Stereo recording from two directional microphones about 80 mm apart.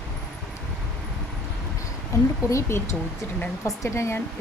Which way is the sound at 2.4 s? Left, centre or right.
Left.